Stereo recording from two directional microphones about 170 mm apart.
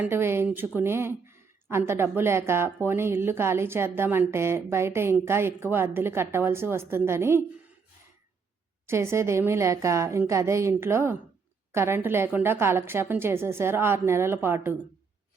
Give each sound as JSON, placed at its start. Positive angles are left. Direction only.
{"t": 0.0, "sound": "a woman's voice", "side_deg": -15}
{"t": 8.9, "sound": "a woman's voice", "side_deg": -15}